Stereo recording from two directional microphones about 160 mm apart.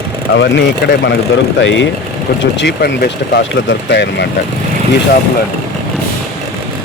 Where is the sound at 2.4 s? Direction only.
90° left.